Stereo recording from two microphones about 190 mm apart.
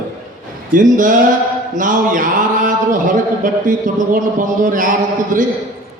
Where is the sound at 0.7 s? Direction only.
45° right (ahead or behind).